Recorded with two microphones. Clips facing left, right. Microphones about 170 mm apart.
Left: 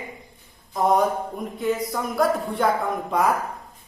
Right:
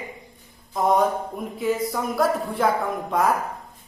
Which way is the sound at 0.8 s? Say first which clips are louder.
Even; centre (ahead or behind).